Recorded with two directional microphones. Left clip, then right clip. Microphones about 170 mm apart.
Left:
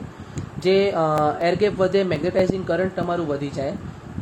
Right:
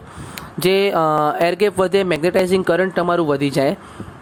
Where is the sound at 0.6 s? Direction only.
50° right (ahead or behind).